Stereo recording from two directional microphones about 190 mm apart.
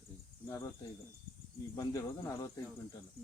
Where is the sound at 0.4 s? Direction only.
15° left (ahead or behind).